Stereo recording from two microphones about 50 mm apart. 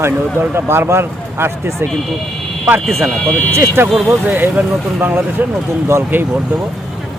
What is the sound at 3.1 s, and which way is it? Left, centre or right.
Speech, left.